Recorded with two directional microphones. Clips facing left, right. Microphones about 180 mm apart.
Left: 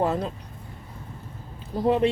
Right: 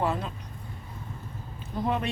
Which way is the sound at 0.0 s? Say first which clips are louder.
Left 4 dB; 40° left (ahead or behind).